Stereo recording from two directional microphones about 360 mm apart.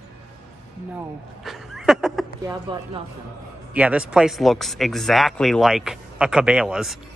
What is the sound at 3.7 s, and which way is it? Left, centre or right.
Speech, centre.